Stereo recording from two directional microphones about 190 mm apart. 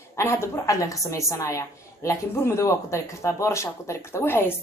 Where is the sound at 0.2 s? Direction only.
15° left (ahead or behind).